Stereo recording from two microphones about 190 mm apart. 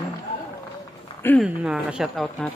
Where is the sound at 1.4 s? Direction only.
5° right (ahead or behind).